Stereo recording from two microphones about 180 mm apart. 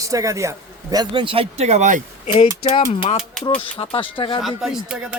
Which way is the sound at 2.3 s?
35° left (ahead or behind).